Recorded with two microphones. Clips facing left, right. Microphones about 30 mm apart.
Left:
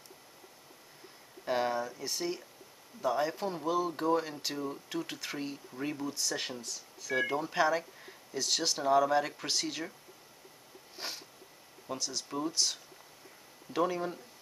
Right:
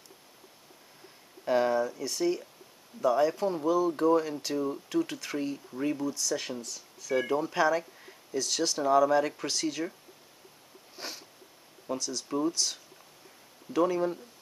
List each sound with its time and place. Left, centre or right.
1.4 s speech: centre
6.0 s speech: left
6.6 s speech: centre
11.0 s a sound: centre
12.0 s speech: centre
12.3 s speech: centre
12.5 s speech: centre